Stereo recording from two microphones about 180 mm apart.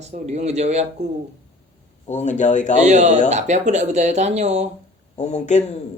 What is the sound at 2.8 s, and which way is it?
Speech, 40° right (ahead or behind).